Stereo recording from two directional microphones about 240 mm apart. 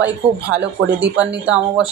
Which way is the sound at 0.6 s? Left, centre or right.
Right.